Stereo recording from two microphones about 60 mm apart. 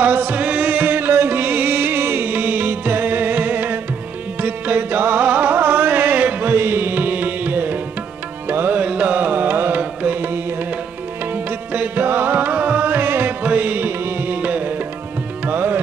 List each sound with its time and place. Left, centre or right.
0.0 s music: right